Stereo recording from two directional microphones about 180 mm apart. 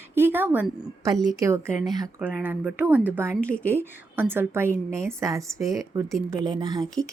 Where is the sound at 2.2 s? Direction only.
10° right (ahead or behind).